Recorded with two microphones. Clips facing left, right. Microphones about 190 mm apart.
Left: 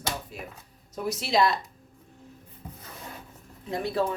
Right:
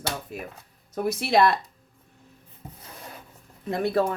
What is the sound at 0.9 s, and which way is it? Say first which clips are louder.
Speech: right 3 dB; 60° right (ahead or behind).